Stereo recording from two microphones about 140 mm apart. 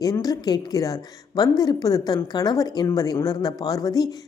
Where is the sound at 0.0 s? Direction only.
25° left (ahead or behind).